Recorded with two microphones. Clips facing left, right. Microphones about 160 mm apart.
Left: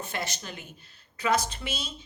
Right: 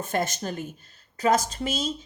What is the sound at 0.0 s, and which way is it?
Speech, 45° right (ahead or behind).